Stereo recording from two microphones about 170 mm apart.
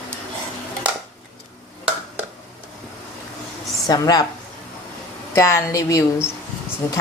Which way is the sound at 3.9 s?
25° left (ahead or behind).